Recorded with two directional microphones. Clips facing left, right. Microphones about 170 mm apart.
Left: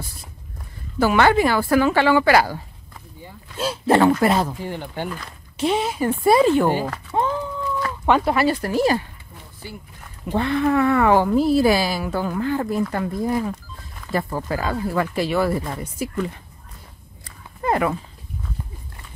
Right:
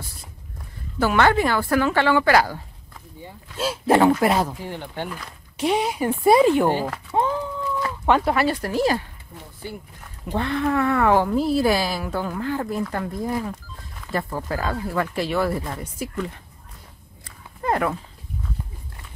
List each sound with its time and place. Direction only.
0.9 s a woman's voice: 10° left (ahead or behind)
3.5 s speech: 5° right (ahead or behind)
4.5 s a woman's voice: centre (ahead or behind)
5.1 s speech: 10° right (ahead or behind)
8.0 s a woman's voice: centre (ahead or behind)
10.3 s a woman's voice: 5° left (ahead or behind)
17.6 s dog: 5° left (ahead or behind)